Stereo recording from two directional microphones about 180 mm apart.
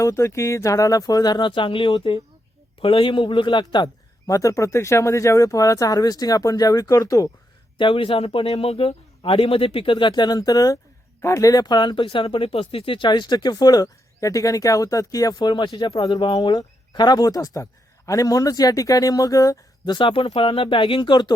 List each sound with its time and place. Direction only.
0.0 s speech: 15° left (ahead or behind)